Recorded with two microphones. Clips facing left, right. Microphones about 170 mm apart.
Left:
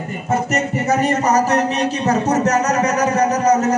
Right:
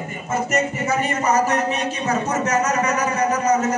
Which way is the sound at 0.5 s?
40° left (ahead or behind).